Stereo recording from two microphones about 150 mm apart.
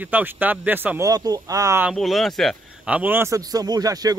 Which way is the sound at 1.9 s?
Centre (ahead or behind).